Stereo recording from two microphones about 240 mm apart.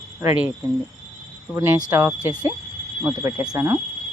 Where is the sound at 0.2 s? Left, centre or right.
Centre.